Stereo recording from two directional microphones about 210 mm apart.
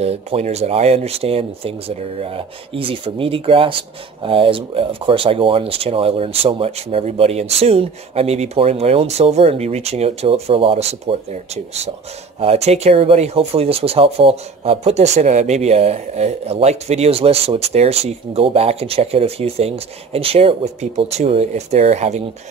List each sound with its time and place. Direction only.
0.0 s speech: 30° right (ahead or behind)